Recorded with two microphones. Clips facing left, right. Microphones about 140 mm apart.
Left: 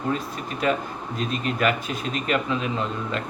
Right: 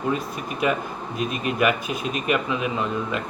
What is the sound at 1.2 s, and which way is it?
Speech, 15° right (ahead or behind).